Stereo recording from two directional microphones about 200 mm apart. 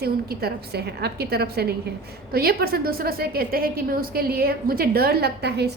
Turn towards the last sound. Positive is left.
turn(degrees=-55)  # may be behind; listen again after turning